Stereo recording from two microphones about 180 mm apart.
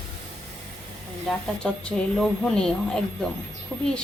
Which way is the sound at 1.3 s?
5° left (ahead or behind).